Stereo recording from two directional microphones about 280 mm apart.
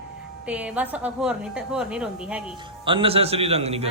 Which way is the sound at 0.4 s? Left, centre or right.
Centre.